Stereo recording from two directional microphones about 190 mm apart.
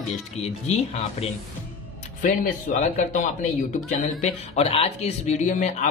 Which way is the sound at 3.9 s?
35° left (ahead or behind).